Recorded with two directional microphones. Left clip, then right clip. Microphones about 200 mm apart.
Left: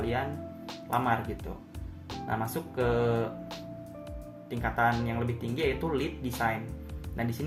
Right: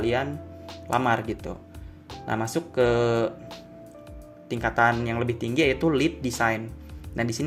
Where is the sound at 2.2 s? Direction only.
40° right (ahead or behind).